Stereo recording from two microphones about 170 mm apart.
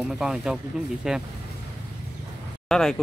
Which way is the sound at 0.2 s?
5° right (ahead or behind).